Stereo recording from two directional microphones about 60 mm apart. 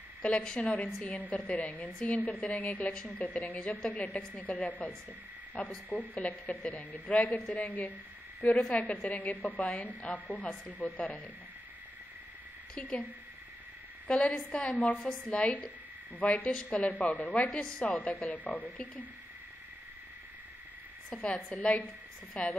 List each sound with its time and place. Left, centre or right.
0.4 s a woman's voice: centre
8.5 s a woman's voice: centre
12.7 s a woman's voice: centre
14.0 s a woman's voice: centre
17.8 s a woman's voice: left
21.1 s a woman's voice: centre